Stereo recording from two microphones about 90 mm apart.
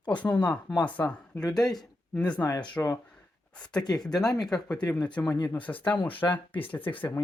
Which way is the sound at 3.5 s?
10° left (ahead or behind).